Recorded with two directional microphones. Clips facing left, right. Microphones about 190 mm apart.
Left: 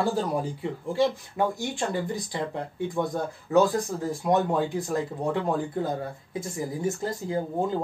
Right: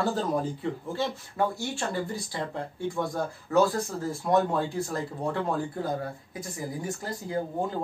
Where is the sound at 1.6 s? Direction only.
15° left (ahead or behind).